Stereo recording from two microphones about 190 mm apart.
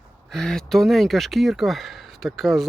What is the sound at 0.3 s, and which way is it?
Speech, 5° left (ahead or behind).